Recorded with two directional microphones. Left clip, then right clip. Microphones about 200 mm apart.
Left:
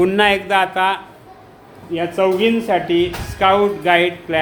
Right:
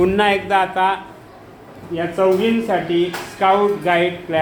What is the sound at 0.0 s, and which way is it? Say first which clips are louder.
Speech: left 1 dB; 20° left (ahead or behind).